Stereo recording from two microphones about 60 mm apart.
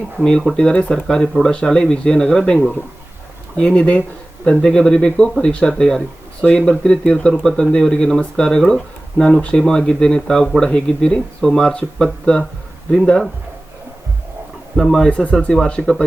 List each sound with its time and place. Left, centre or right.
0.2 s speech: centre
3.6 s speech: centre
14.8 s speech: centre
15.1 s speech: left
15.8 s speech: centre